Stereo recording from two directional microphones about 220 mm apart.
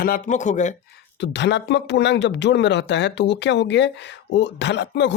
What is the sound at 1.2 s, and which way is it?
Speech, 55° left (ahead or behind).